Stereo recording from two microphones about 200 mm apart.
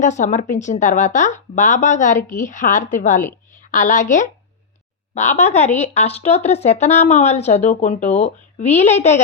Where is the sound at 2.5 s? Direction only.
40° left (ahead or behind).